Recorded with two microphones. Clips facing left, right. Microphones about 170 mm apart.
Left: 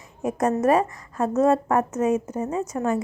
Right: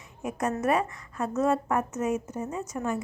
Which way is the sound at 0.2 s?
40° left (ahead or behind).